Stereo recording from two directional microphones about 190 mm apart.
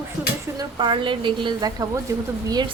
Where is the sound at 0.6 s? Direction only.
25° right (ahead or behind).